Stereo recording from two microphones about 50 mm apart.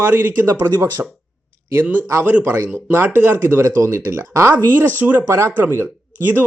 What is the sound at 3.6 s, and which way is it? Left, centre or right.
Speech, right.